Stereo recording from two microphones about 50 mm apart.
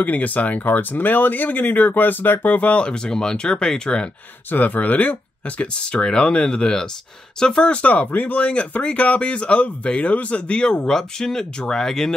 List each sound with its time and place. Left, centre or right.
0.0 s speech: left
4.5 s speech: left
5.6 s speech: centre